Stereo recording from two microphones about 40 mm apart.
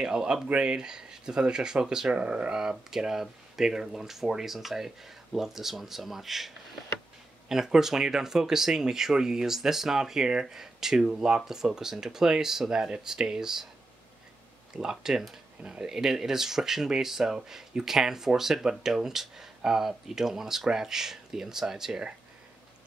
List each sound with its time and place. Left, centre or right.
0.0 s speech: centre
2.1 s speech: right
2.5 s speech: centre
14.8 s speech: centre
15.6 s speech: right
15.9 s speech: centre